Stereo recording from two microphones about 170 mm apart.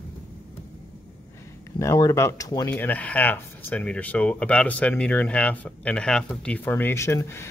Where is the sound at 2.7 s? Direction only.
10° left (ahead or behind).